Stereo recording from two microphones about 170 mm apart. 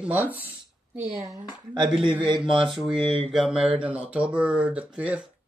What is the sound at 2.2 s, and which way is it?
Speech, 30° right (ahead or behind).